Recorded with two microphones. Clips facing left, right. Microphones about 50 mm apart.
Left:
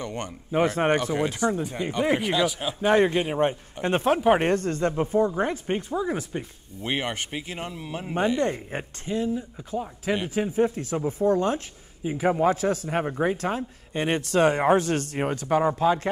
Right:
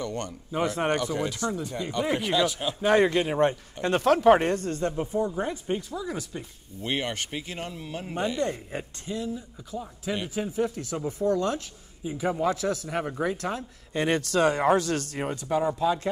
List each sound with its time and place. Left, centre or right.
0.0 s speech: left
2.8 s speech: left
4.5 s speech: left
6.9 s speech: centre
8.1 s speech: left